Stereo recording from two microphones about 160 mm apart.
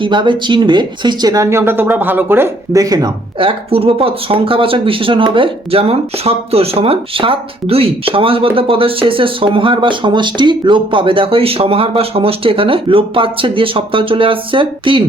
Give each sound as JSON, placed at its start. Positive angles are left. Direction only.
{"t": 0.0, "sound": "speech", "side_deg": -30}